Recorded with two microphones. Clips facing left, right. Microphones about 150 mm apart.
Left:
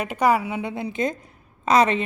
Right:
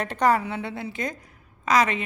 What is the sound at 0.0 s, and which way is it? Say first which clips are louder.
A woman's voice: left 1 dB; 10° left (ahead or behind).